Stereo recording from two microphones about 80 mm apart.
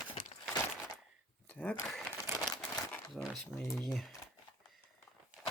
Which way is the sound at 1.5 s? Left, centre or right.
Centre.